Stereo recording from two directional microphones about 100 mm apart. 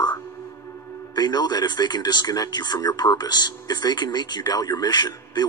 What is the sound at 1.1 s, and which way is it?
Speech, 40° left (ahead or behind).